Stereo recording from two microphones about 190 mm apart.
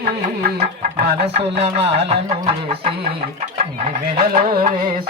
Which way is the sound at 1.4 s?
30° right (ahead or behind).